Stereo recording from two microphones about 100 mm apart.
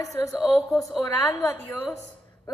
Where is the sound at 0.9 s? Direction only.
35° left (ahead or behind).